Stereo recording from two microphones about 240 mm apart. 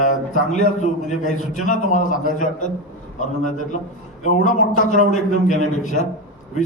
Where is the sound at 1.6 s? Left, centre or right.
Left.